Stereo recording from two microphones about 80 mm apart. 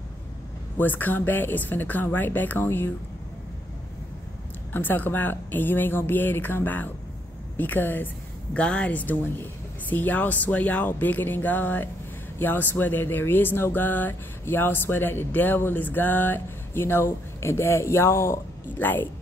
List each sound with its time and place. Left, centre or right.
0.7 s speech: left
4.7 s speech: left